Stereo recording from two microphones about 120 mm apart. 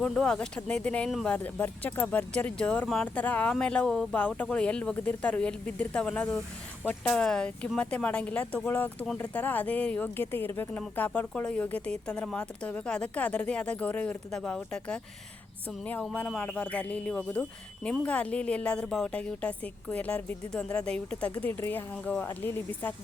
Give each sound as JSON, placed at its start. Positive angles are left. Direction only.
{"t": 0.0, "sound": "speech", "side_deg": 5}
{"t": 16.1, "sound": "speech", "side_deg": 10}